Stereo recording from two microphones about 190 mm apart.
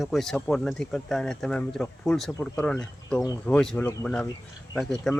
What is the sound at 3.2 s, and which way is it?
Speech, 20° left (ahead or behind).